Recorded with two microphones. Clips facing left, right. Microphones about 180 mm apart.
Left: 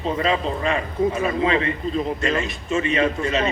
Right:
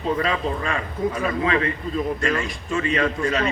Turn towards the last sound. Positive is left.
turn(degrees=25)  # may be behind; listen again after turning